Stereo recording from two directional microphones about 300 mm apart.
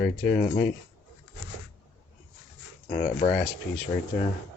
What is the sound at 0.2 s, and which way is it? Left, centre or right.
Speech, left.